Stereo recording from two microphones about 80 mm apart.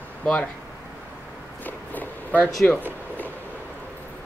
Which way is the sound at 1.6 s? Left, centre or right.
Left.